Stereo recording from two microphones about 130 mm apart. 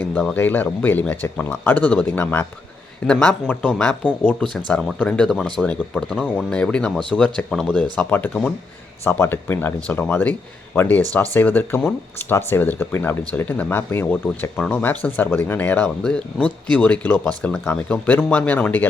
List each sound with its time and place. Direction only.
0.0 s speech: 10° left (ahead or behind)